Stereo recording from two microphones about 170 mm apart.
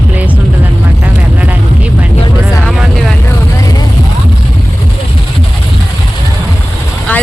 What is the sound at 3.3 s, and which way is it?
Vehicle, 20° left (ahead or behind).